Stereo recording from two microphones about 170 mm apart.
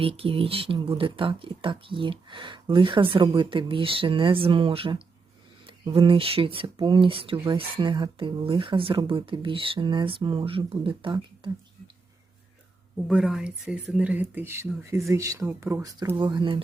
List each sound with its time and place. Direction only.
0.0 s speech: 35° right (ahead or behind)
13.1 s speech: 5° right (ahead or behind); by 16.6 s 30° right (ahead or behind)